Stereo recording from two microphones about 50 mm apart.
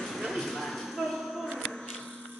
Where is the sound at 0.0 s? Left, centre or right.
Centre.